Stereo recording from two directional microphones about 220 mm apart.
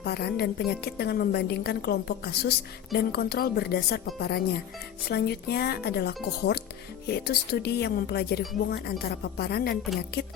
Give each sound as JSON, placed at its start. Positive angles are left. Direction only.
{"t": 0.0, "sound": "a woman's voice", "side_deg": 45}